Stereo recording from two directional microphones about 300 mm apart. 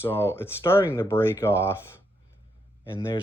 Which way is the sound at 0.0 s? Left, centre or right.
Centre.